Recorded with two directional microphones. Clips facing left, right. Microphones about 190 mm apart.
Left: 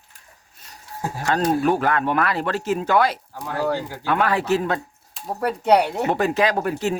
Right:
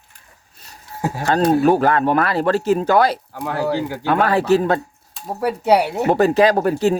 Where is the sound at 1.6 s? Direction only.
35° right (ahead or behind).